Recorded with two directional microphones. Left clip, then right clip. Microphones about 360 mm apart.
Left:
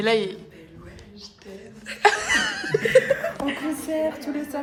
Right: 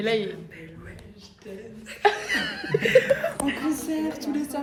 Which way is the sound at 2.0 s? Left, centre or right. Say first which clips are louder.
Left 4 dB; centre.